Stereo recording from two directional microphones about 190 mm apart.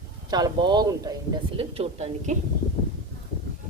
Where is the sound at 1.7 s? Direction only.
35° right (ahead or behind).